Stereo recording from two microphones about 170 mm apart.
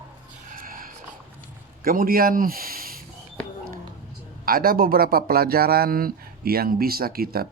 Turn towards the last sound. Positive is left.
turn(degrees=-60)  # may be behind; listen again after turning